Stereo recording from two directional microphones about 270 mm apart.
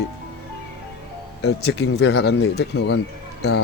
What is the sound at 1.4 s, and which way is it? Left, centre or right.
Speech, left.